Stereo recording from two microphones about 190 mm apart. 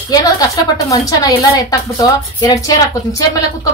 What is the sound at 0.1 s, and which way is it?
A woman's voice, 20° left (ahead or behind).